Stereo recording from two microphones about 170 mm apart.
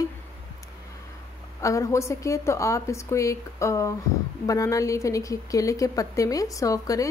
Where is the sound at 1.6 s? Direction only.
20° left (ahead or behind).